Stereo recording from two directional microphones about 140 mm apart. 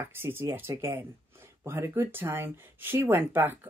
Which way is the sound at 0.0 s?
15° right (ahead or behind).